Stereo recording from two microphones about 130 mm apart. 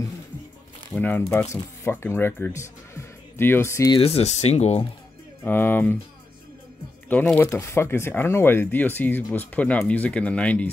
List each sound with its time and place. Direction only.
0.9 s speech: 15° left (ahead or behind)
3.9 s speech: 50° left (ahead or behind)
5.4 s speech: 15° left (ahead or behind)
7.1 s speech: 15° left (ahead or behind)